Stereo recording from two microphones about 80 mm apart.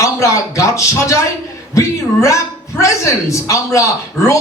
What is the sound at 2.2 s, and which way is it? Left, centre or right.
A man's voice, left.